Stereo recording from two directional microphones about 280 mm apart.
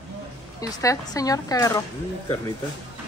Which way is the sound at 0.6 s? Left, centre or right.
Centre.